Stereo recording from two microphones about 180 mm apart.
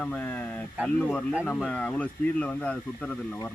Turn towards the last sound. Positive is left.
turn(degrees=5)  # may be behind; listen again after turning